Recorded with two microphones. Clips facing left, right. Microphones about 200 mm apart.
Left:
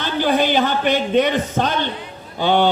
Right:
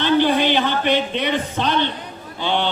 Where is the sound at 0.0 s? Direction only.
45° left (ahead or behind).